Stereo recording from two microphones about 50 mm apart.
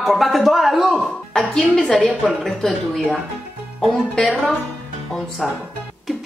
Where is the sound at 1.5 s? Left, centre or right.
Centre.